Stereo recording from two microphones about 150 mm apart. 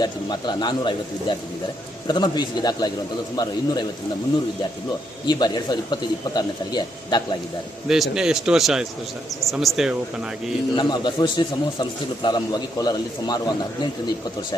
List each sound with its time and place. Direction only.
0.0 s speech: 30° left (ahead or behind)
5.2 s speech: 30° left (ahead or behind)
7.9 s a man's voice: centre (ahead or behind)
10.8 s speech: 30° left (ahead or behind)